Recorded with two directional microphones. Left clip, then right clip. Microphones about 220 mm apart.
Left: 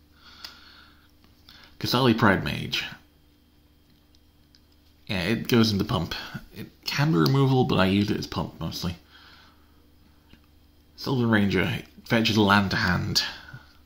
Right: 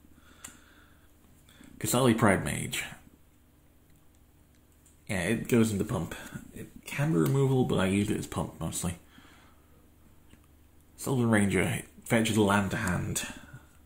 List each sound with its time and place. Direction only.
1.8 s speech: 10° left (ahead or behind)
5.0 s speech: 10° left (ahead or behind)
11.0 s speech: 5° left (ahead or behind)